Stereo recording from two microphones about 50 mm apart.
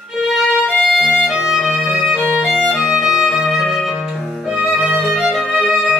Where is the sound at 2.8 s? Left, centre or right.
Centre.